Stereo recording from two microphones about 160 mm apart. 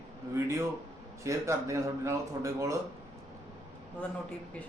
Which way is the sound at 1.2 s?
20° right (ahead or behind).